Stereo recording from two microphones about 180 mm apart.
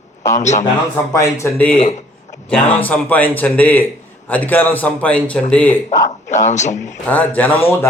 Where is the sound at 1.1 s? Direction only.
15° left (ahead or behind).